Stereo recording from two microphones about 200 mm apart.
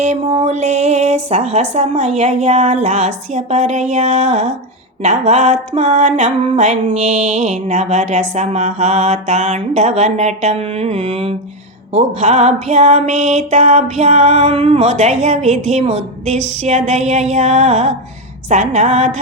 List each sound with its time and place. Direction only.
0.0 s music: 30° right (ahead or behind)